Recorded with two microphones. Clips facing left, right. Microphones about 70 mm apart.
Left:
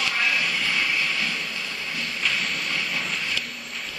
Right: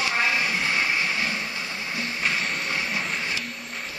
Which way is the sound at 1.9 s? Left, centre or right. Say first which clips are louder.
Right 1 dB; right.